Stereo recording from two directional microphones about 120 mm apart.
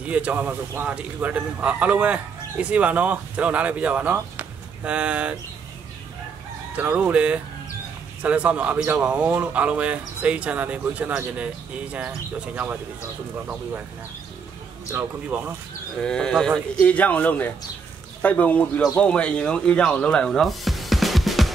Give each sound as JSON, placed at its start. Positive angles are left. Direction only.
{"t": 0.0, "sound": "a man's voice", "side_deg": -10}
{"t": 6.7, "sound": "a man's voice", "side_deg": -10}
{"t": 14.9, "sound": "a man's voice", "side_deg": -15}
{"t": 16.0, "sound": "speech", "side_deg": 5}